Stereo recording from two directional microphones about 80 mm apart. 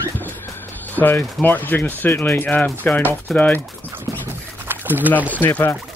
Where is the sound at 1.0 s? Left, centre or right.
Left.